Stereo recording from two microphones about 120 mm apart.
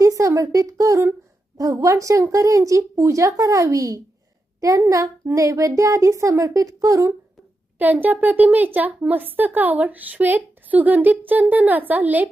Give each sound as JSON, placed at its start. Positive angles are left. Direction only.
{"t": 0.0, "sound": "a woman's voice", "side_deg": -25}
{"t": 7.8, "sound": "speech", "side_deg": -15}